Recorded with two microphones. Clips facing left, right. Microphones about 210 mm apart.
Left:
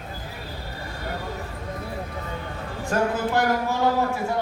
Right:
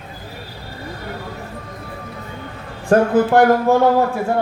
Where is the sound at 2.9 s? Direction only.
55° right (ahead or behind).